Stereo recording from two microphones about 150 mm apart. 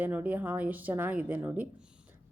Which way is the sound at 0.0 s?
10° right (ahead or behind).